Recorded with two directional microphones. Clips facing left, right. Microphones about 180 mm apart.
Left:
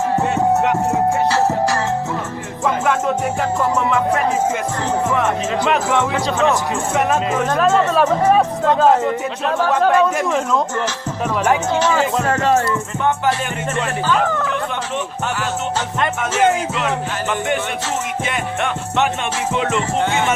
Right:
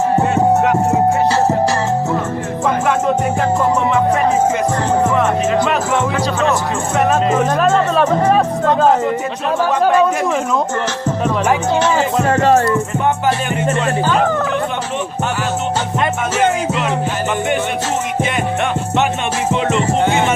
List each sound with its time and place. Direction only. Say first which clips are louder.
0.9 s music: right 3 dB; 20° right (ahead or behind)
6.9 s speech: right 4 dB; 5° left (ahead or behind)
12.5 s speech: right 4 dB; 45° right (ahead or behind)
14.1 s speech: even; 40° right (ahead or behind)